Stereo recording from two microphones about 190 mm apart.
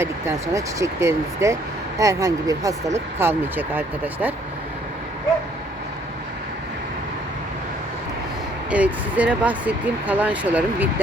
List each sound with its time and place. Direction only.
0.0 s speech: 15° right (ahead or behind)
8.7 s speech: 5° right (ahead or behind)